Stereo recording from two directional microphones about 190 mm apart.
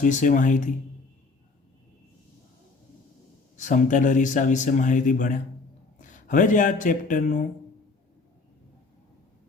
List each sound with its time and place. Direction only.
0.0 s speech: 45° left (ahead or behind)
3.6 s speech: 40° left (ahead or behind)